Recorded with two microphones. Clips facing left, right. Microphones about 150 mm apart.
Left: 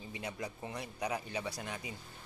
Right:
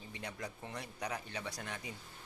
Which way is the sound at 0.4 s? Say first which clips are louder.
Left 3 dB; 10° left (ahead or behind).